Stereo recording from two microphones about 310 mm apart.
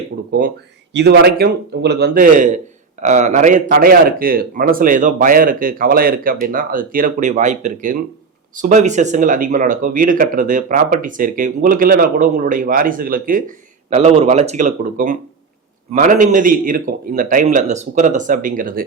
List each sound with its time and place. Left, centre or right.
0.3 s a man's voice: right